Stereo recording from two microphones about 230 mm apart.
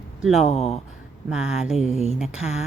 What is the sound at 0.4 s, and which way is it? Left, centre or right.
Speech, left.